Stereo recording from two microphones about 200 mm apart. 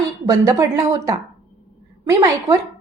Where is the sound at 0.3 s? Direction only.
15° right (ahead or behind).